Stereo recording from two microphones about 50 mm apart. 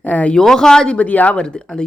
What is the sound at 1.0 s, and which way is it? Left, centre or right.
Speech, left.